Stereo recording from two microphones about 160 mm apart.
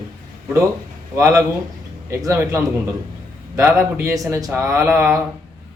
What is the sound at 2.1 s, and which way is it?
Speech, 20° right (ahead or behind).